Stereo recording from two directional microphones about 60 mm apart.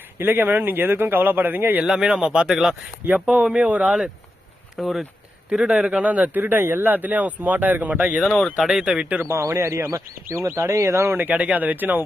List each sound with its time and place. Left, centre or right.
0.2 s speech: right
1.8 s speech: centre
3.2 s speech: centre
4.8 s speech: centre
5.5 s speech: centre
6.1 s speech: right
8.4 s speech: centre
9.0 s speech: right
9.2 s speech: right
11.2 s speech: right